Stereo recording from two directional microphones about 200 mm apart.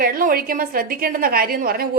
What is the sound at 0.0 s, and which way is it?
A woman's voice, 45° right (ahead or behind).